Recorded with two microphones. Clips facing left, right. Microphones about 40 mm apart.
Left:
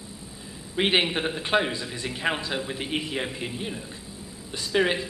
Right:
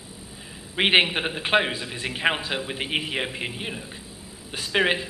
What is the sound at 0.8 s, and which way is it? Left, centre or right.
A man's voice, right.